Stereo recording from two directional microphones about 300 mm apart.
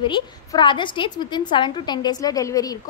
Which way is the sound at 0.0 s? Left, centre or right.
Centre.